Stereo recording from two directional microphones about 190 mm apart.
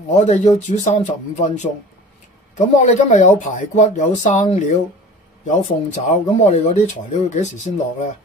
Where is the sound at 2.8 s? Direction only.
40° left (ahead or behind).